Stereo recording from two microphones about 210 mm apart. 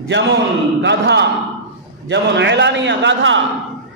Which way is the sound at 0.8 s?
55° right (ahead or behind).